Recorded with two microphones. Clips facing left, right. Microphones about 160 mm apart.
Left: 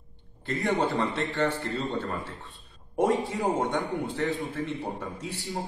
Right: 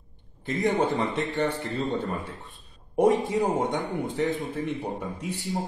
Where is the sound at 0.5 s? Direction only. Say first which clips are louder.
Right 2 dB; 20° right (ahead or behind).